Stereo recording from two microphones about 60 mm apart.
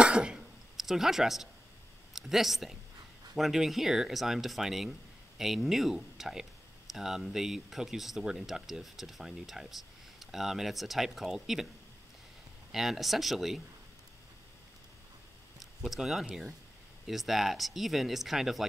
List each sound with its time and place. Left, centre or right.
0.0 s throat clearing: centre
0.7 s speech: centre
12.7 s speech: centre
15.8 s speech: centre